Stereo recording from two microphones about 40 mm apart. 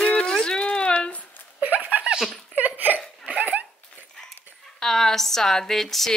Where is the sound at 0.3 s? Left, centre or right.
Centre.